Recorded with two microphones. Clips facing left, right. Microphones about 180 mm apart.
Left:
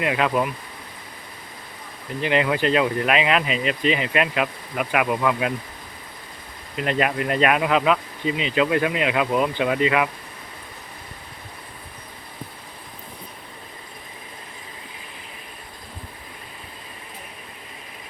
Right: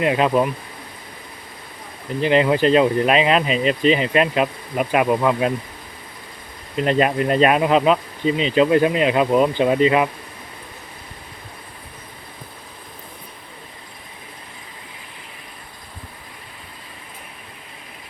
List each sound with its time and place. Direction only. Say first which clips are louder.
0.0 s speech: right 4 dB; 25° right (ahead or behind)
2.2 s speech: right 5 dB; 30° right (ahead or behind)
6.7 s speech: right 5 dB; 30° right (ahead or behind)